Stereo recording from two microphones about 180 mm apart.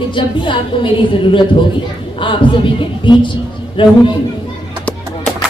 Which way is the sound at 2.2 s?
25° left (ahead or behind).